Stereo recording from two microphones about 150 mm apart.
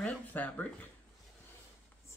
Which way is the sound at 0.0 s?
10° left (ahead or behind).